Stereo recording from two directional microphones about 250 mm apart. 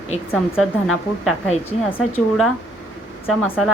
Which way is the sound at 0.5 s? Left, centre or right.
Centre.